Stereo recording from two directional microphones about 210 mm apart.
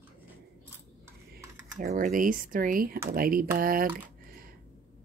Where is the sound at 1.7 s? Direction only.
40° right (ahead or behind).